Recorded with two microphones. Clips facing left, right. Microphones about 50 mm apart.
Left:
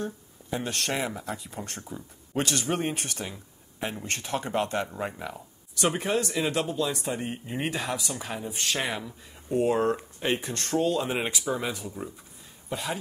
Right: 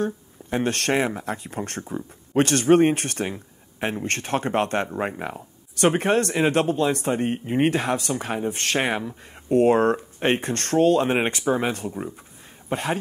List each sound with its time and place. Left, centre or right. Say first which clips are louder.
0.0 s speech: right 8 dB; right
3.3 s speech: right 5 dB; right